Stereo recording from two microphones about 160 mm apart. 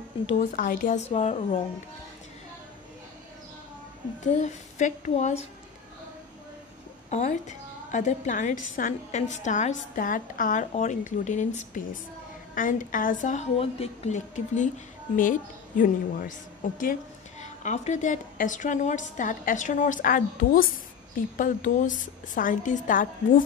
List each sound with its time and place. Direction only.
0.4 s a woman's voice: 55° left (ahead or behind)
4.2 s a woman's voice: 45° left (ahead or behind)
7.1 s a woman's voice: 45° left (ahead or behind)